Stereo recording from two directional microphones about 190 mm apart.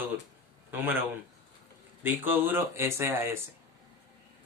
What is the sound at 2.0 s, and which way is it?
Speech, 10° right (ahead or behind).